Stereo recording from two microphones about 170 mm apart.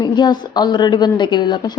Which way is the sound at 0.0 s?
25° left (ahead or behind).